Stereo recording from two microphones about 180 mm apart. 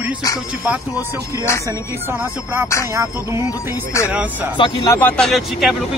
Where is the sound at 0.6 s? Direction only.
10° right (ahead or behind).